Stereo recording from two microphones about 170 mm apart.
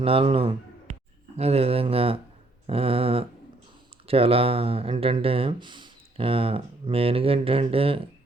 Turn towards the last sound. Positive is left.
turn(degrees=-35)  # may be behind; listen again after turning